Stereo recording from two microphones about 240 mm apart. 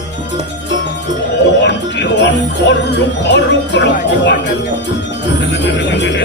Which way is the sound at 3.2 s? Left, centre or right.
Left.